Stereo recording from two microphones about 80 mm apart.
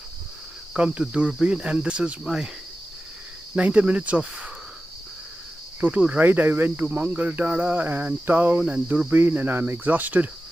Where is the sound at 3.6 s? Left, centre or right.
Centre.